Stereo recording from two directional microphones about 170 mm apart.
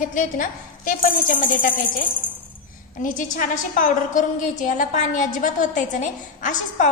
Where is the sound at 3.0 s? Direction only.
50° left (ahead or behind).